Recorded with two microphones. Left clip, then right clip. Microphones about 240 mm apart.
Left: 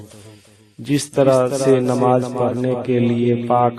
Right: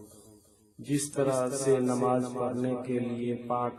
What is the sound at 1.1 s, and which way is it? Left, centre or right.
A man's voice, left.